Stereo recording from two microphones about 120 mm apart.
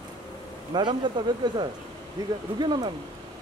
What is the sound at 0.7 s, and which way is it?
Speech, 40° right (ahead or behind).